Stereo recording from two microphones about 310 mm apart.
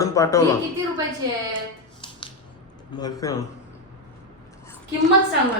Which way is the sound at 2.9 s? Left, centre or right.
Centre.